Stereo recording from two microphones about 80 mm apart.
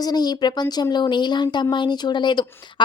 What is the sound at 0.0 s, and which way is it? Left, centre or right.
A woman's voice, left.